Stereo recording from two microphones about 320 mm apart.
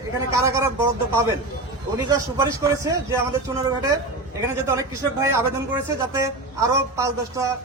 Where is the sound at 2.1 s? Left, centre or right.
Centre.